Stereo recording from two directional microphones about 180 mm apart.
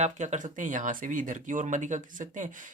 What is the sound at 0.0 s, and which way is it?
Speech, 40° right (ahead or behind).